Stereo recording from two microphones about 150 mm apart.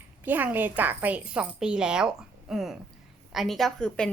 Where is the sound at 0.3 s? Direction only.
10° right (ahead or behind).